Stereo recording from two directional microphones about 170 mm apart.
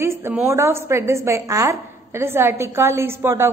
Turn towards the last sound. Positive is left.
turn(degrees=-15)  # may be behind; listen again after turning